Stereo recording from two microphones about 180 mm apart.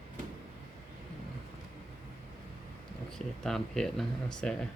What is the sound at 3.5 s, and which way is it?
Speech, 5° left (ahead or behind).